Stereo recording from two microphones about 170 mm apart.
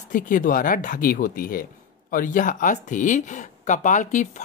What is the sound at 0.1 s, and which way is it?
Speech, 50° left (ahead or behind).